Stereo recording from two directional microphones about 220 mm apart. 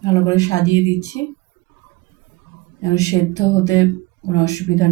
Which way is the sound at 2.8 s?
15° left (ahead or behind).